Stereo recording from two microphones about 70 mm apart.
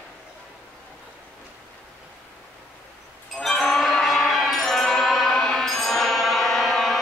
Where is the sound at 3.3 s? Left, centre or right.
Centre.